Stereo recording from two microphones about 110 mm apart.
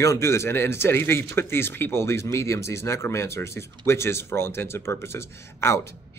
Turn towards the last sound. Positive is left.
turn(degrees=25)  # may be behind; listen again after turning